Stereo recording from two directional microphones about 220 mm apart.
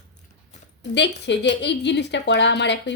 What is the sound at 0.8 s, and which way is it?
A woman's voice, 50° left (ahead or behind).